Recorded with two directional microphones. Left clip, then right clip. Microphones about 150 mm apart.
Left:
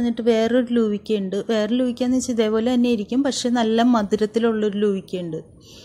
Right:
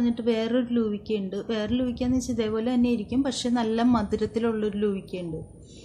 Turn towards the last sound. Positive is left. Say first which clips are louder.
# left 6 dB
turn(degrees=50)  # may be behind; listen again after turning